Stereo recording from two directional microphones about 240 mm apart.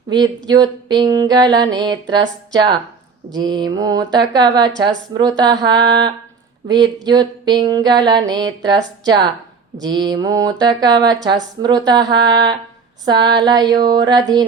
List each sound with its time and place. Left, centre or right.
0.4 s speech: centre